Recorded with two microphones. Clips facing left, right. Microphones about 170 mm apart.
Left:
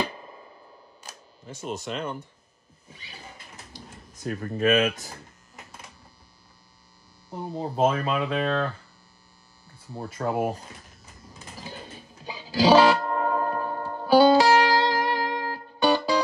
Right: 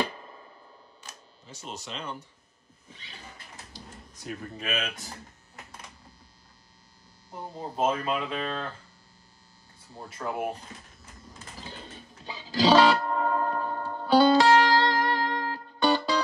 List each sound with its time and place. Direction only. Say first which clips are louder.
1.4 s speech: left 8 dB; 55° left (ahead or behind)
4.6 s speech: left 13 dB; 55° left (ahead or behind)
7.2 s hum: left 6 dB; 70° left (ahead or behind)
9.9 s hum: left 6 dB; 70° left (ahead or behind)
12.3 s music: left 3 dB; 10° left (ahead or behind)